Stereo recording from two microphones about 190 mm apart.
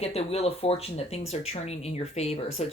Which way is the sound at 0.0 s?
30° left (ahead or behind).